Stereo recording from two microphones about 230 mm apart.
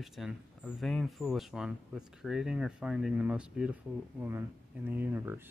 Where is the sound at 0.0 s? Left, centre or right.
Centre.